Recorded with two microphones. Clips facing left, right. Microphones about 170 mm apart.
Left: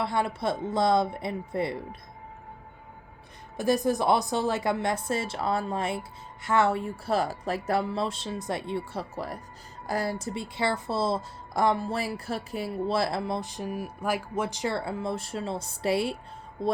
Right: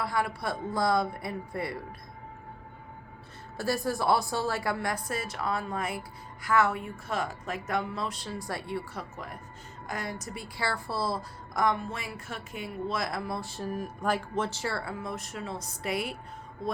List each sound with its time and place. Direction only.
0.0 s a woman's voice: 25° left (ahead or behind)
3.6 s a woman's voice: 20° left (ahead or behind)